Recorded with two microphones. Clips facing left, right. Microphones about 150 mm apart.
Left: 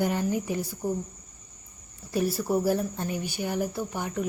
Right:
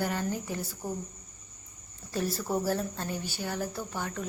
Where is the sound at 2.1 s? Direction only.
15° left (ahead or behind).